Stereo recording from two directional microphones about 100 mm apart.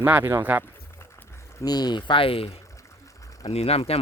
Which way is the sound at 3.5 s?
90° left.